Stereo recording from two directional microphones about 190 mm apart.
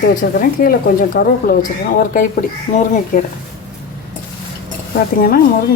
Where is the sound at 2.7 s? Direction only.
35° left (ahead or behind).